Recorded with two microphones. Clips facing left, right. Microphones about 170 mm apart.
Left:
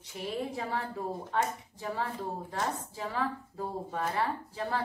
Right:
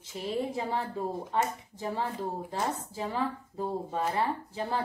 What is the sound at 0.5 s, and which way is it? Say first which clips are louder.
A woman's voice: right 3 dB; 20° right (ahead or behind).